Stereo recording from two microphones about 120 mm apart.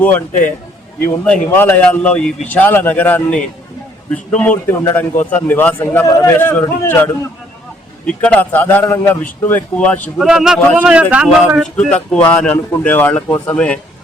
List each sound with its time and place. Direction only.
0.0 s a man's voice: 15° left (ahead or behind)
6.1 s a man's voice: 30° left (ahead or behind)
6.4 s a man's voice: 15° left (ahead or behind)
10.2 s speech: 5° right (ahead or behind)
11.6 s a man's voice: 5° left (ahead or behind)